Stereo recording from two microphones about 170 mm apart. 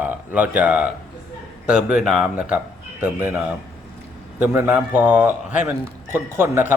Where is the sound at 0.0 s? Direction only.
10° right (ahead or behind).